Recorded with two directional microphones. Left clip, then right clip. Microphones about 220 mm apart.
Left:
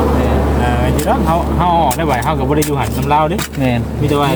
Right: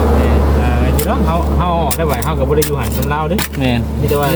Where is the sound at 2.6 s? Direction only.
35° right (ahead or behind).